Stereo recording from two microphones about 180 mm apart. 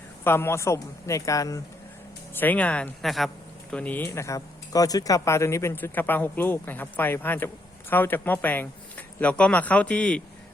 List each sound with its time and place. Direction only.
0.3 s speech: 15° left (ahead or behind)